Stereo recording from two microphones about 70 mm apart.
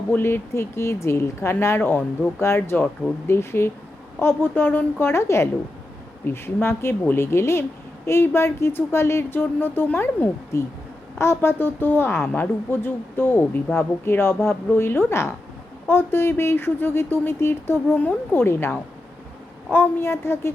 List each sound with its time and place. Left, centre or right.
0.1 s speech: left
10.5 s speech: left
19.7 s speech: left